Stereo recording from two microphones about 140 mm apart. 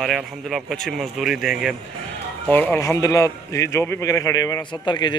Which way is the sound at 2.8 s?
25° left (ahead or behind).